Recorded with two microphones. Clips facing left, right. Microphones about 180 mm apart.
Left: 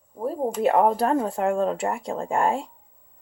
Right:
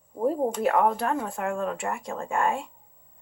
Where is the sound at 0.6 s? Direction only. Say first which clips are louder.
Left 5 dB; 30° left (ahead or behind).